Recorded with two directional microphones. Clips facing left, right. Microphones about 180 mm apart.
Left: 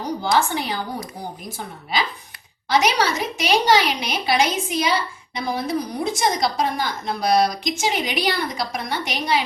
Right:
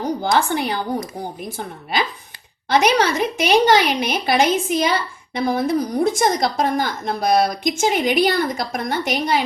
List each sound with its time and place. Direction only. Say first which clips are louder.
0.3 s a woman's voice: even; 55° right (ahead or behind)